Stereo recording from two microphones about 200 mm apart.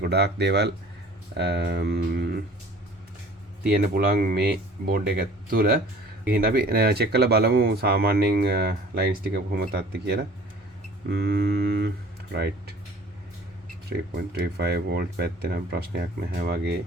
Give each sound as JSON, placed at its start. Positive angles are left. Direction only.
{"t": 0.0, "sound": "speech", "side_deg": -55}
{"t": 3.9, "sound": "speech", "side_deg": -45}
{"t": 13.9, "sound": "speech", "side_deg": -55}